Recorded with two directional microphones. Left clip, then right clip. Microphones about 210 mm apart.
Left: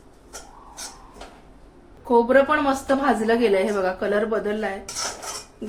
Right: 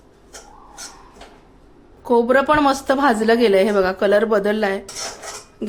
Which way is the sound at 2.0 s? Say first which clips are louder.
Right 2 dB; 50° right (ahead or behind).